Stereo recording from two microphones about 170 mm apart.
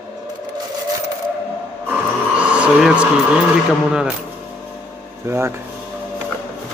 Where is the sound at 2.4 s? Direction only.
5° right (ahead or behind).